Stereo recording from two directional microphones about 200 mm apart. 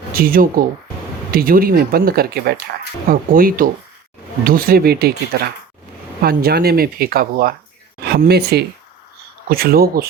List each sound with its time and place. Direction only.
0.1 s speech: 45° right (ahead or behind)